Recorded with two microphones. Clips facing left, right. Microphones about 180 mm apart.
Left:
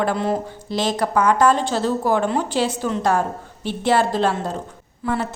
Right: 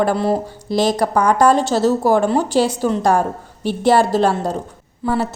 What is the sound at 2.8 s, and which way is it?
Speech, 35° right (ahead or behind).